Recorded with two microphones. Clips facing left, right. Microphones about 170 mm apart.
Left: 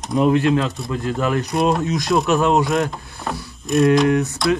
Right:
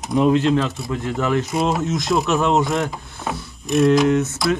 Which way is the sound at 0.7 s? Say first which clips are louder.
Left 1 dB; centre (ahead or behind).